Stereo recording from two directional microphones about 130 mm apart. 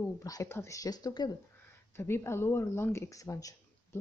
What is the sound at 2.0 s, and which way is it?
Speech, 20° left (ahead or behind).